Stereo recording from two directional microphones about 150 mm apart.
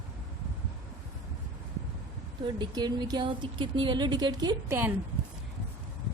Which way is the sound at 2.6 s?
25° right (ahead or behind).